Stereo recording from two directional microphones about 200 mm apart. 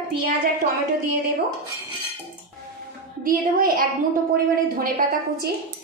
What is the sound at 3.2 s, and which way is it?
A woman's voice, 45° right (ahead or behind).